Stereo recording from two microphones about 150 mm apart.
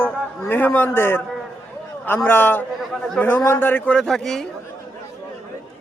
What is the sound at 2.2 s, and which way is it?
A man's voice, 10° left (ahead or behind).